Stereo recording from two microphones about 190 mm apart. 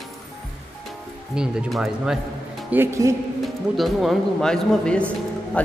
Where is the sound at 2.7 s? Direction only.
15° right (ahead or behind).